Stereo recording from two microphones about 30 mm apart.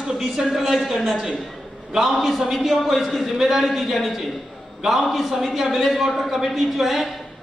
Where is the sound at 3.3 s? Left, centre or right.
Centre.